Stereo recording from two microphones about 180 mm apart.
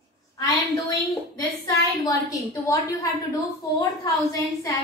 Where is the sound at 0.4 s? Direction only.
20° left (ahead or behind).